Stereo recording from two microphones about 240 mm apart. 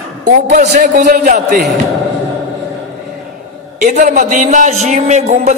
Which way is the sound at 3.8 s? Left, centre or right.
Right.